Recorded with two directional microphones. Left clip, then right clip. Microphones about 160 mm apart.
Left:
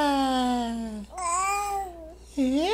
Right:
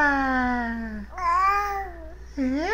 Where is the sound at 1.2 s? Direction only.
5° right (ahead or behind).